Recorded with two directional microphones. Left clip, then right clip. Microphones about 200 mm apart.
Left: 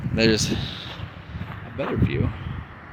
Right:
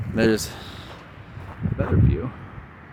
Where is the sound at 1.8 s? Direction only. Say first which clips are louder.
Even; centre (ahead or behind).